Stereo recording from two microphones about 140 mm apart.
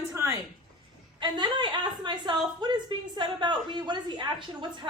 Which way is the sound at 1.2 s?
30° right (ahead or behind).